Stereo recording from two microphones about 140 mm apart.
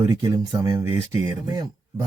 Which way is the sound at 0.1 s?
25° right (ahead or behind).